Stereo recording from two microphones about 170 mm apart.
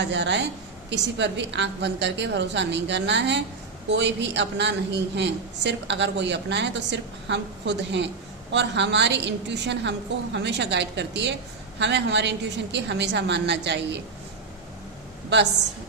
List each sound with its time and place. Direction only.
0.0 s a woman's voice: 90° right